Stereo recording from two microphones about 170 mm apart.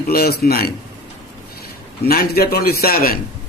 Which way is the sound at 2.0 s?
65° left (ahead or behind).